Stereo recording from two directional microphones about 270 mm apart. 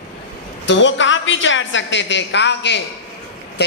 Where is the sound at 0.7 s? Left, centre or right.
Left.